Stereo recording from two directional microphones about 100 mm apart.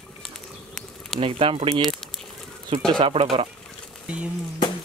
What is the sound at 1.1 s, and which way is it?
Speech, 65° right (ahead or behind).